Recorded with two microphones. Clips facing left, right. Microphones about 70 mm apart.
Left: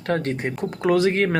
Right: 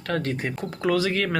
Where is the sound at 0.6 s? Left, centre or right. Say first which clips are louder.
Left 4 dB; centre.